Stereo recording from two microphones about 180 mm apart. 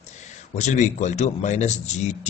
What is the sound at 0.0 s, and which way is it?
Speech, 40° left (ahead or behind).